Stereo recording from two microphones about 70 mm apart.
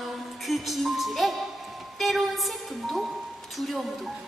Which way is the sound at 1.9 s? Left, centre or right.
Centre.